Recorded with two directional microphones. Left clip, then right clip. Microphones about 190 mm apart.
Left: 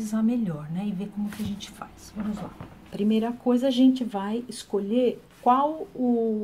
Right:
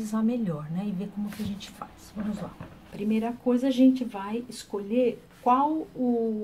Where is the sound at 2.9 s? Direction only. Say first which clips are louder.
Left 3 dB; 45° left (ahead or behind).